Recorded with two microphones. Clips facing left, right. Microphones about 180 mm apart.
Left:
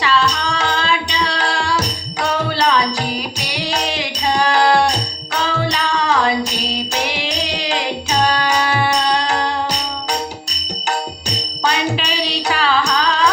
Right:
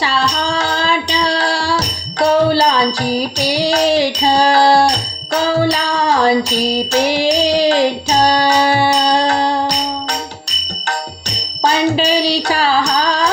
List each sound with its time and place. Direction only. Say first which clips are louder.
0.0 s music: even; 30° right (ahead or behind)
11.6 s music: right 6 dB; 35° right (ahead or behind)